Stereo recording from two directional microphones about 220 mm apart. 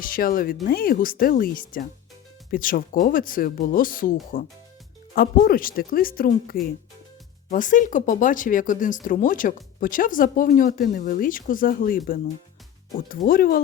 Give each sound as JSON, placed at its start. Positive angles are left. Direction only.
{"t": 0.0, "sound": "speech", "side_deg": 40}